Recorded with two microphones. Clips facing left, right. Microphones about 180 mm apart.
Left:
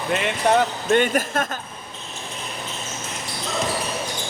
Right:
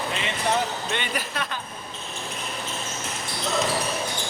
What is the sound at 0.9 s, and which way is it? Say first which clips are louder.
Speech: left 11 dB; 45° left (ahead or behind).